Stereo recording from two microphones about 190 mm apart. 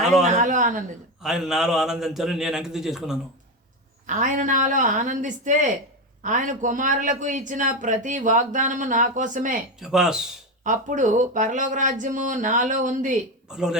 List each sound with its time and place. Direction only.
0.3 s a man's voice: 40° right (ahead or behind)
1.2 s a man's voice: centre (ahead or behind)
4.0 s a man's voice: 40° right (ahead or behind)
9.8 s a man's voice: centre (ahead or behind)
10.6 s a man's voice: 40° right (ahead or behind)
13.5 s a man's voice: 5° right (ahead or behind)